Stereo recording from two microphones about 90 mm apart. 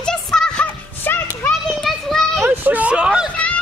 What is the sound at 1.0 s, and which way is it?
Children playing, 25° left (ahead or behind).